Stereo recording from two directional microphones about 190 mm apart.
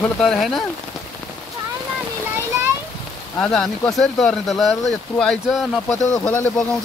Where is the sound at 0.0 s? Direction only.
5° left (ahead or behind).